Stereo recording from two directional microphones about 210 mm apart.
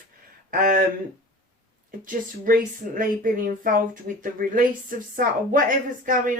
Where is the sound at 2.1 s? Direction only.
40° right (ahead or behind).